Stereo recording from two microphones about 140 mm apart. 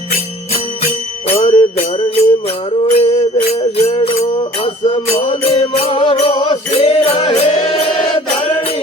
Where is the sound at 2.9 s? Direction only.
45° left (ahead or behind).